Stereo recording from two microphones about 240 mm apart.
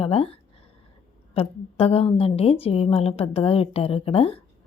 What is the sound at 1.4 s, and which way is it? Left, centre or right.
A woman's voice, left.